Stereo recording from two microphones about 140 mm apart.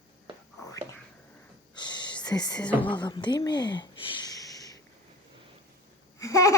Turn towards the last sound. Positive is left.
turn(degrees=25)  # may be behind; listen again after turning